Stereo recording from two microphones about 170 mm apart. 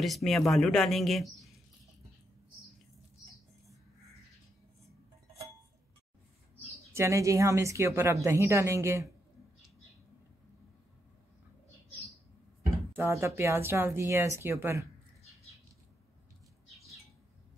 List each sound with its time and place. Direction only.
0.0 s speech: centre (ahead or behind)
6.9 s speech: 15° right (ahead or behind)
12.9 s speech: 15° right (ahead or behind)